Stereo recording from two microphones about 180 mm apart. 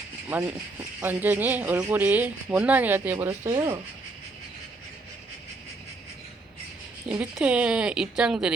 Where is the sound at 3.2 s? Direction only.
20° right (ahead or behind).